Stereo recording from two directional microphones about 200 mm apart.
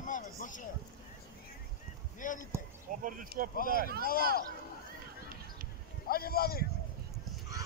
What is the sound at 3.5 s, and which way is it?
Speech, 45° left (ahead or behind).